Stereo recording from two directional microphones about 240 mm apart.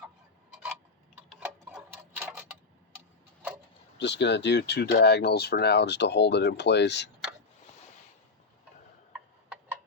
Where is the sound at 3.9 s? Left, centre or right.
Left.